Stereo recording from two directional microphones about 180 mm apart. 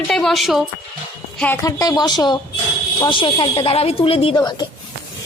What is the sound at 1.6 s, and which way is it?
A woman's voice, 20° left (ahead or behind).